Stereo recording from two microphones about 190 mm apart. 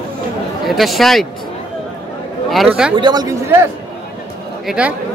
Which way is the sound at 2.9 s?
20° right (ahead or behind).